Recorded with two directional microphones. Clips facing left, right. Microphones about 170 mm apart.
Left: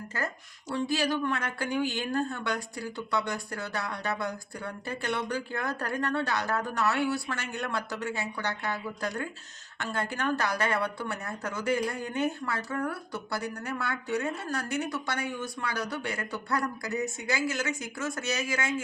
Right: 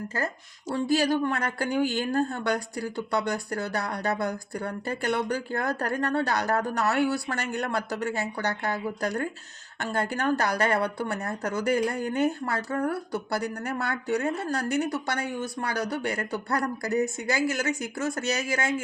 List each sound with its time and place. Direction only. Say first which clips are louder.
0.1 s speech: right 1 dB; 35° right (ahead or behind)